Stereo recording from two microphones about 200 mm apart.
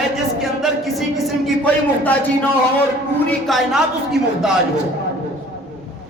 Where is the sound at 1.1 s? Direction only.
Centre (ahead or behind).